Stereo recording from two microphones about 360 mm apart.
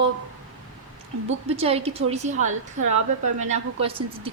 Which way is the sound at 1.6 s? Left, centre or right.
Centre.